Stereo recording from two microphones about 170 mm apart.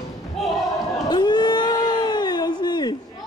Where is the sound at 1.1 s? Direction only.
25° left (ahead or behind).